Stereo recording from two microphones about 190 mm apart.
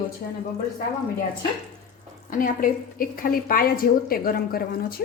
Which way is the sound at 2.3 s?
45° left (ahead or behind).